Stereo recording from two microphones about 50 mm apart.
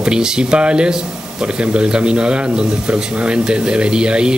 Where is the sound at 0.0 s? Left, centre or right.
Centre.